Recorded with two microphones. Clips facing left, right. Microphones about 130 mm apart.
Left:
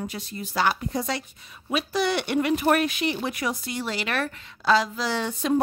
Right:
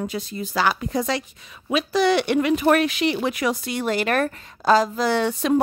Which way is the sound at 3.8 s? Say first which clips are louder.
Right 7 dB; 50° right (ahead or behind).